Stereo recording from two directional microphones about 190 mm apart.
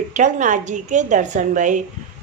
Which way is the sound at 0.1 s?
40° right (ahead or behind).